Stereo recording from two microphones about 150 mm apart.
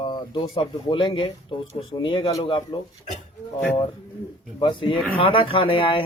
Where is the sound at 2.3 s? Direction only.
25° left (ahead or behind).